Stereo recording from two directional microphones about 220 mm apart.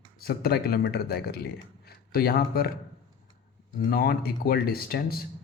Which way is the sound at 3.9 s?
45° left (ahead or behind).